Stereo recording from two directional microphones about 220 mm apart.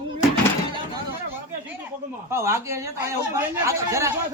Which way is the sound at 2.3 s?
10° right (ahead or behind).